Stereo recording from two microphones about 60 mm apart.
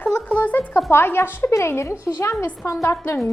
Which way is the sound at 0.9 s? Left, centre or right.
Left.